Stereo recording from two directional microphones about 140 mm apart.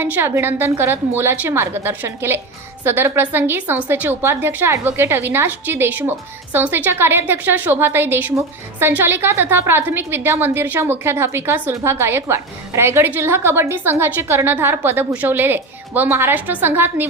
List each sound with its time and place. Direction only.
0.0 s a woman's voice: 15° right (ahead or behind)